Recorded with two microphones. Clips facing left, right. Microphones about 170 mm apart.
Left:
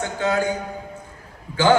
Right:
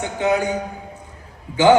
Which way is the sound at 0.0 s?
20° right (ahead or behind).